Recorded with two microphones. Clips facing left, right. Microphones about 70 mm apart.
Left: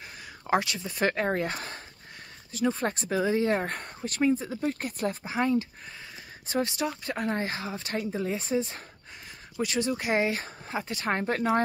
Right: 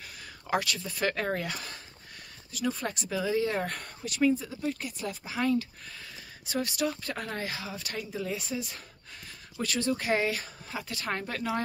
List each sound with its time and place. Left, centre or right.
0.5 s speech: left
5.2 s speech: left